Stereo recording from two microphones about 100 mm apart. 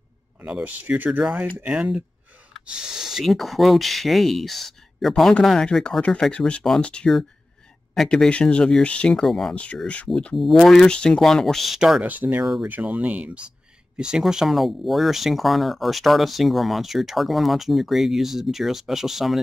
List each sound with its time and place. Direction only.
0.4 s speech: 15° right (ahead or behind)
12.0 s speech: 20° right (ahead or behind); by 19.4 s centre (ahead or behind)